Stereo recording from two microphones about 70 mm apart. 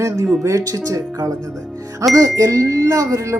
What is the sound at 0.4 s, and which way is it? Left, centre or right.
Speech, right.